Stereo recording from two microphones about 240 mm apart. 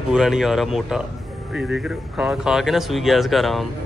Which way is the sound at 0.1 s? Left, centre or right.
Centre.